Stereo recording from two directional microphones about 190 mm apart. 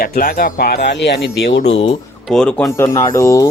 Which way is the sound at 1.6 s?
35° left (ahead or behind).